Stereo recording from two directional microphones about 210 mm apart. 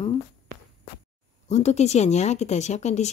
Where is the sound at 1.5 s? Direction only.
35° left (ahead or behind).